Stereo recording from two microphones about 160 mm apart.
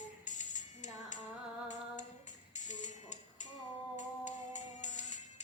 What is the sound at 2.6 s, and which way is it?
Music, 50° left (ahead or behind).